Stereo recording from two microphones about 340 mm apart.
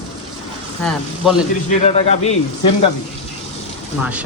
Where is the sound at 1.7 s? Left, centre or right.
Centre.